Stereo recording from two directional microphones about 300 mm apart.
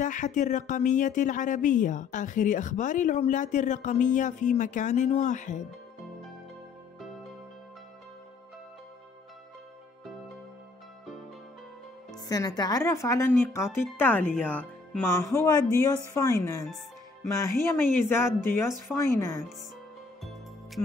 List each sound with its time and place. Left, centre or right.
0.0 s speech: left
12.3 s speech: centre